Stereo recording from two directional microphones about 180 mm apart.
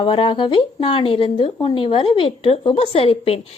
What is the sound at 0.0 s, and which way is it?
Speech, 30° left (ahead or behind).